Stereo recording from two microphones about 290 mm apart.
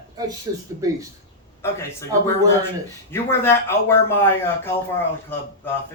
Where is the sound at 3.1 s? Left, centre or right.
Centre.